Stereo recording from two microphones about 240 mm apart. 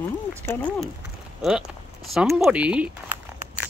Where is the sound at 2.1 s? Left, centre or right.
Centre.